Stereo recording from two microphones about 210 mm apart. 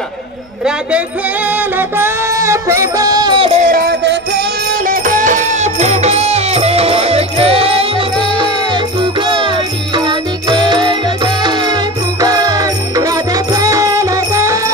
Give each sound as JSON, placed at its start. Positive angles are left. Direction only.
{"t": 1.8, "sound": "music", "side_deg": -10}
{"t": 4.8, "sound": "music", "side_deg": -40}